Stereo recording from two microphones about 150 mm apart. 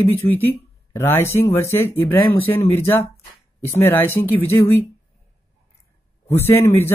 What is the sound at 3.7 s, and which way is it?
Speech, 15° left (ahead or behind).